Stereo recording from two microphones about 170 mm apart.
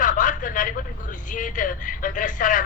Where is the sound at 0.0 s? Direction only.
50° left (ahead or behind).